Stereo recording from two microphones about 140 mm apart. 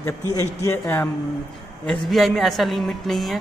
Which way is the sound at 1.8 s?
Centre (ahead or behind).